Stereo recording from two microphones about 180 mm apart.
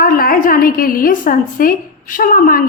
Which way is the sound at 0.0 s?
55° left (ahead or behind).